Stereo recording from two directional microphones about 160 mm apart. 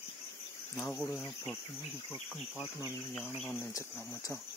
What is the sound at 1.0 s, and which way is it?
Speech, 15° left (ahead or behind).